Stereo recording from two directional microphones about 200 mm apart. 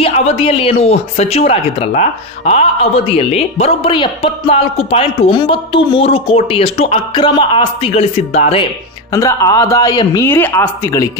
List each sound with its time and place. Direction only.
0.0 s speech: 30° left (ahead or behind)
9.1 s speech: 15° left (ahead or behind)